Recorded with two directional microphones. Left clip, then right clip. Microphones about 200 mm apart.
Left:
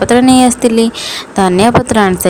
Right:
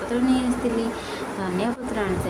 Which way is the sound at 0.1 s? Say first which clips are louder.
Left 14 dB; 60° left (ahead or behind).